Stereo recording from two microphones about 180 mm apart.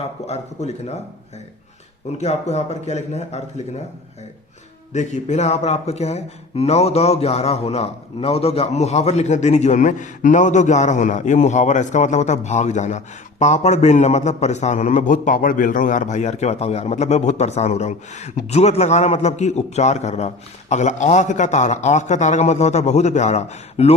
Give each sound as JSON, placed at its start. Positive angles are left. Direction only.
{"t": 0.3, "sound": "a man's voice", "side_deg": 35}
{"t": 2.1, "sound": "a man's voice", "side_deg": 35}
{"t": 4.9, "sound": "a man's voice", "side_deg": 40}